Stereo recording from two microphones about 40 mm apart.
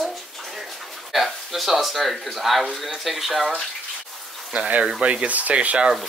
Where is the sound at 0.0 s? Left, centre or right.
Centre.